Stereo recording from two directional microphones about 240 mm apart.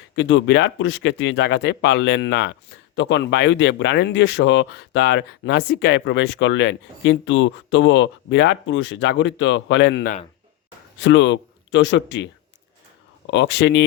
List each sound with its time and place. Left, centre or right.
0.2 s speech: left